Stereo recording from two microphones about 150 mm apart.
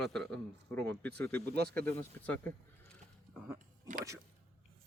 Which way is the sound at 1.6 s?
90° right.